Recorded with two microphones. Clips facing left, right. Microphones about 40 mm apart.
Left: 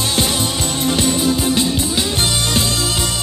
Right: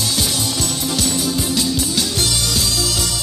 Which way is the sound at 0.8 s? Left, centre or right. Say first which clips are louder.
Left 6 dB; left.